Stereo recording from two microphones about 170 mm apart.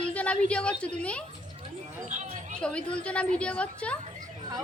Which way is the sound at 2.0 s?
45° right (ahead or behind).